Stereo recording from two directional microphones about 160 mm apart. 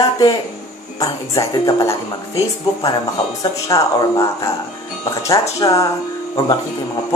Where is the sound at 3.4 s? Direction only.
20° left (ahead or behind).